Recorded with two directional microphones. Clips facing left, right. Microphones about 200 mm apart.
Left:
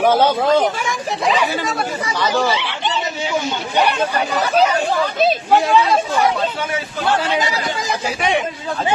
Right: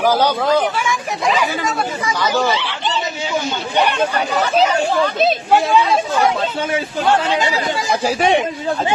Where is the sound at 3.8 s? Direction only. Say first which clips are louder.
Right 1 dB; 10° left (ahead or behind).